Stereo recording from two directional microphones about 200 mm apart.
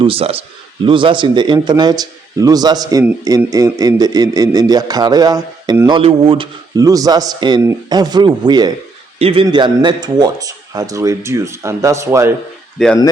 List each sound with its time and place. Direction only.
0.0 s speech: 30° right (ahead or behind)
6.0 s a man's voice: 30° right (ahead or behind)
12.8 s speech: centre (ahead or behind)